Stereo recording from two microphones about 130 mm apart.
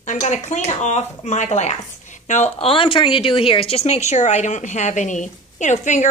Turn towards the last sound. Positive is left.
turn(degrees=70)  # may be behind; listen again after turning